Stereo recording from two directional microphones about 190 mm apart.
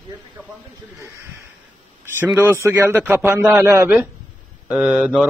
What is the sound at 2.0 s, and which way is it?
A man's voice, 10° right (ahead or behind).